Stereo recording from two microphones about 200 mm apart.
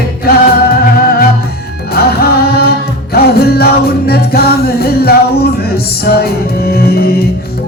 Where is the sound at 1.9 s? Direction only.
50° left (ahead or behind).